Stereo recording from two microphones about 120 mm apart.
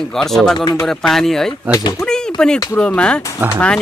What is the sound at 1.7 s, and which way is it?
Speech, 25° left (ahead or behind).